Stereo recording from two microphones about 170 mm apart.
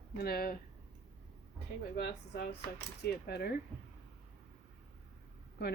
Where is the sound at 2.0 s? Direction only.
75° left (ahead or behind).